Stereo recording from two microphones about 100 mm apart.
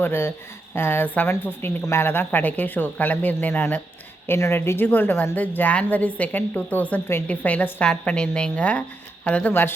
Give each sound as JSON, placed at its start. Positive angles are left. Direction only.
{"t": 0.0, "sound": "a woman's voice", "side_deg": 20}